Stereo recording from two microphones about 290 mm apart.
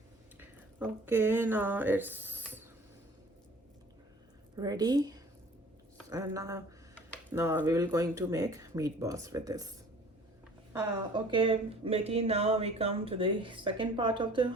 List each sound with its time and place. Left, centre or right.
0.3 s speech: centre
4.5 s speech: centre
10.7 s speech: centre